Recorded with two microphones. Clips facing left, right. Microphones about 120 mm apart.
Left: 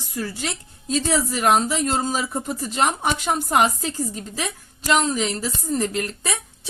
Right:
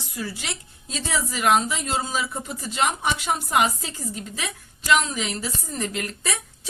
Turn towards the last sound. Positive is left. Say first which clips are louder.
# left 4 dB
turn(degrees=35)  # may be behind; listen again after turning